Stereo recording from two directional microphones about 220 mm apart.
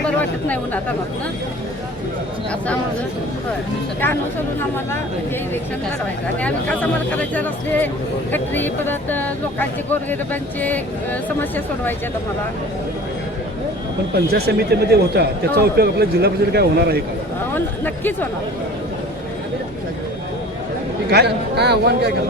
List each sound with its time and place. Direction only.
0.2 s speech: 5° left (ahead or behind)
6.4 s speech: 5° left (ahead or behind)
14.3 s speech: 45° right (ahead or behind)
17.5 s speech: 10° left (ahead or behind)
21.1 s speech: 50° right (ahead or behind)